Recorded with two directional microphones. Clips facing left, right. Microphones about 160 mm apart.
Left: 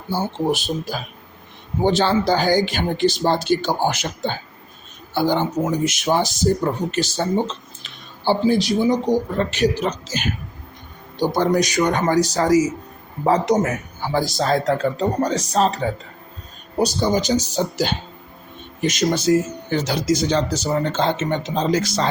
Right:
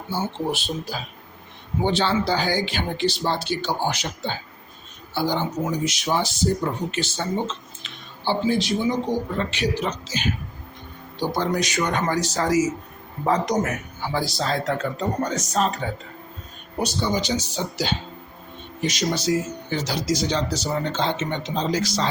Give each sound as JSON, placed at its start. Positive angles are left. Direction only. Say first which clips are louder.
{"t": 0.1, "sound": "a man's voice", "louder": "left 5 dB", "side_deg": 40}
{"t": 14.1, "sound": "speech", "louder": "left 5 dB", "side_deg": 45}